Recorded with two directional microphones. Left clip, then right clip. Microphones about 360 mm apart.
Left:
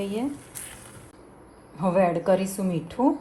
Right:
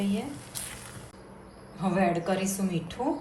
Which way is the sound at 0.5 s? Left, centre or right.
Centre.